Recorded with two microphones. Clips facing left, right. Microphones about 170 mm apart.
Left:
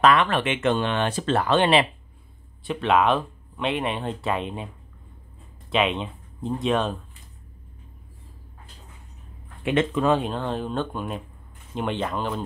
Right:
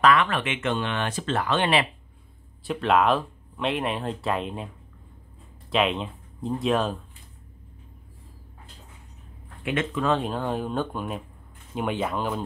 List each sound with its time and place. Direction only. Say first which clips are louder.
0.0 s speech: left 2 dB; 25° left (ahead or behind)
2.6 s speech: left 1 dB; centre (ahead or behind)
5.7 s speech: left 1 dB; centre (ahead or behind)
9.7 s speech: left 5 dB; 25° left (ahead or behind)
10.2 s speech: even; 10° right (ahead or behind)